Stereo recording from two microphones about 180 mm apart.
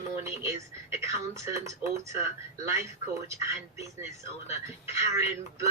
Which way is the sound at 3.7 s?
15° right (ahead or behind).